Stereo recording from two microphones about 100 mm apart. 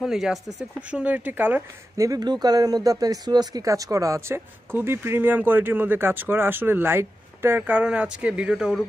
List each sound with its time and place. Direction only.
0.0 s speech: 5° right (ahead or behind)
0.8 s speech: 15° right (ahead or behind)
2.0 s speech: 40° right (ahead or behind); by 8.8 s 10° right (ahead or behind)